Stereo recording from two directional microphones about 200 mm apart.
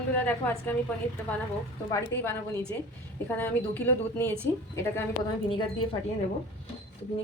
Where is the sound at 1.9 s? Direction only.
15° left (ahead or behind).